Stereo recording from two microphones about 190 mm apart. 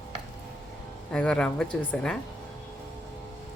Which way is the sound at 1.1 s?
5° left (ahead or behind).